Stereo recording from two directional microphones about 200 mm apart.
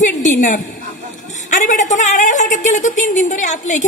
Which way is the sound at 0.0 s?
40° left (ahead or behind).